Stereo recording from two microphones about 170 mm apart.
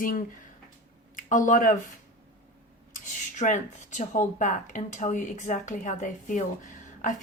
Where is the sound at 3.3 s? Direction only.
45° left (ahead or behind).